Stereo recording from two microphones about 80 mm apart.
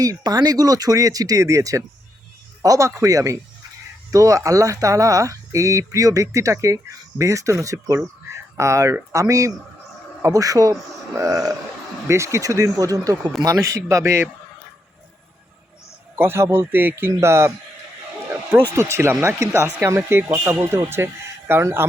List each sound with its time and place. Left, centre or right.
0.0 s speech: right
16.1 s speech: right
17.0 s speech: right
18.7 s speech: right